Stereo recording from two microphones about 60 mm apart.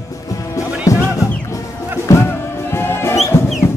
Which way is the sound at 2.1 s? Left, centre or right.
Left.